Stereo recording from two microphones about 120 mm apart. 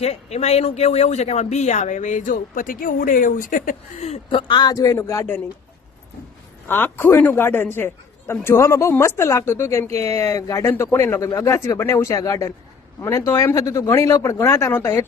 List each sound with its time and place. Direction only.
0.0 s speech: 60° left (ahead or behind); by 3.6 s 90° left
4.3 s a man's voice: 45° left (ahead or behind); by 5.4 s 20° left (ahead or behind)
6.7 s speech: 15° left (ahead or behind)